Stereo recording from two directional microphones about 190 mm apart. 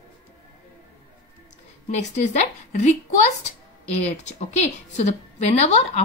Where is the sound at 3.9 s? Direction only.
35° left (ahead or behind).